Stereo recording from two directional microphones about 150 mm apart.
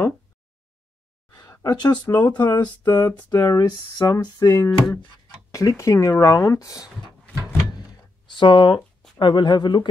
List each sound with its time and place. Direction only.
1.3 s a sound: 25° left (ahead or behind)
2.4 s speech: 25° left (ahead or behind)
4.6 s speech: 5° left (ahead or behind)
5.3 s speech: 20° left (ahead or behind)
8.3 s speech: 35° left (ahead or behind)